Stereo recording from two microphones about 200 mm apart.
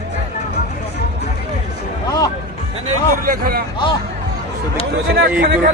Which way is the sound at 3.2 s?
45° right (ahead or behind).